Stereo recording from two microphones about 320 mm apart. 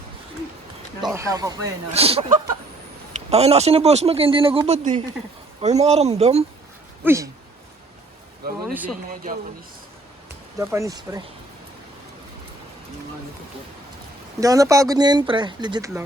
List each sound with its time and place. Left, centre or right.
1.0 s a man's voice: centre
7.0 s speech: centre
8.6 s speech: centre
9.0 s a man's voice: right
10.6 s speech: centre
14.4 s speech: centre